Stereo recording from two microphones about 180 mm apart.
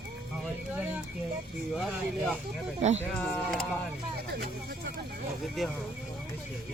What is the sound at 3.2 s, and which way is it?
Speech, centre (ahead or behind).